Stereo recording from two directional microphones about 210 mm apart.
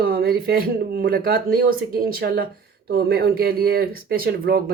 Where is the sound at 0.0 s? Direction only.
45° right (ahead or behind).